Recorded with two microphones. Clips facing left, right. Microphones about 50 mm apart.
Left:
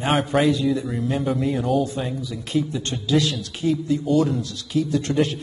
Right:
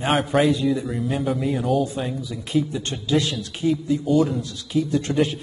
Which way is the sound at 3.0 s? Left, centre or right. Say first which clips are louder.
Left 1 dB; right.